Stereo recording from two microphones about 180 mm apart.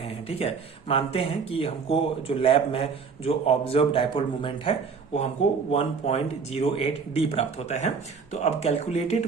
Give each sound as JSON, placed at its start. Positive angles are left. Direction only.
{"t": 0.0, "sound": "speech", "side_deg": 30}